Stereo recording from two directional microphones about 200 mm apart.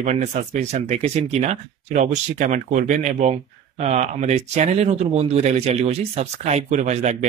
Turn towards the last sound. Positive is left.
turn(degrees=-35)  # may be behind; listen again after turning